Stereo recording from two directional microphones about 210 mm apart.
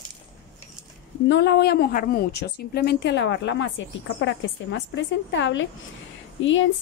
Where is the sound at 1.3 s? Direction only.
50° left (ahead or behind).